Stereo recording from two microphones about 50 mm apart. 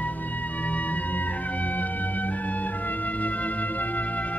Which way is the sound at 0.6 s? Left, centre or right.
Left.